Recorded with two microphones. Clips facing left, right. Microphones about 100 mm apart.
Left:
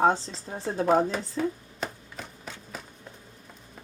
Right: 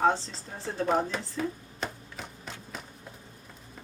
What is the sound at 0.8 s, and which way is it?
Shuffling cards, 5° left (ahead or behind).